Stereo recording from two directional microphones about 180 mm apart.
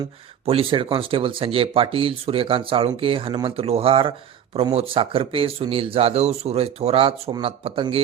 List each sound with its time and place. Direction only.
0.4 s speech: 30° right (ahead or behind)